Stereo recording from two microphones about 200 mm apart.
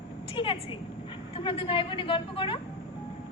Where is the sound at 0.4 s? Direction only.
25° left (ahead or behind).